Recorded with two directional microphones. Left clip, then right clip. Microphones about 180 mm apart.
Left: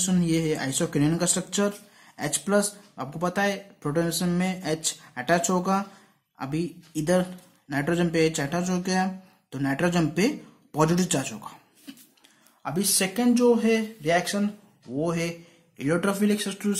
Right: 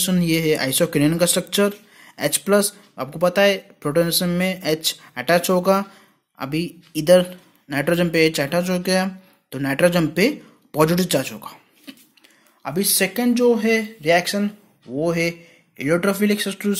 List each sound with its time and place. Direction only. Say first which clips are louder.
0.0 s speech: right 6 dB; 25° right (ahead or behind)